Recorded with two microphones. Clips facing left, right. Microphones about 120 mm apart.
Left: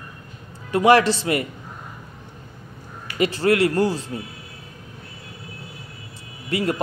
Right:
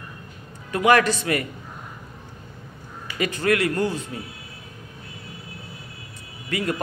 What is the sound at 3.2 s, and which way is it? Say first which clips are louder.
Speech: left 4 dB; 30° left (ahead or behind).